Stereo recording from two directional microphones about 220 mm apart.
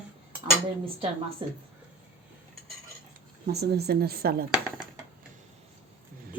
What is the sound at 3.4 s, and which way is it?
A woman's voice, 45° right (ahead or behind).